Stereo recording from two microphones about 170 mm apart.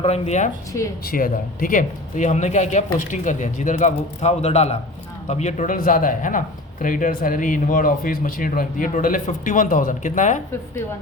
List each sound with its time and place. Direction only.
0.0 s speech: 40° left (ahead or behind)
1.0 s speech: 55° left (ahead or behind)